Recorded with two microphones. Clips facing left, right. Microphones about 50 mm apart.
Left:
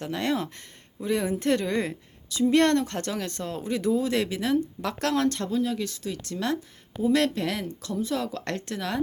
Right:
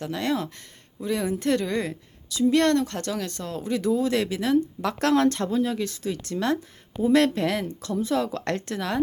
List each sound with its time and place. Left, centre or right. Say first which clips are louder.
0.0 s speech: right 1 dB; centre